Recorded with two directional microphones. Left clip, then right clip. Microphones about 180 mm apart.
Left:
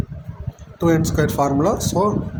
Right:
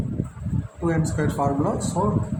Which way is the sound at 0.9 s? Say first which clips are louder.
Left 7 dB; 55° left (ahead or behind).